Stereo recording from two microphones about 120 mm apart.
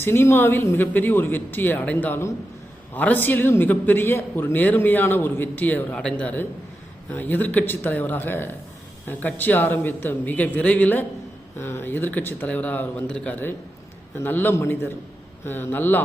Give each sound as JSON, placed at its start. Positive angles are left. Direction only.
{"t": 0.0, "sound": "a man's voice", "side_deg": 20}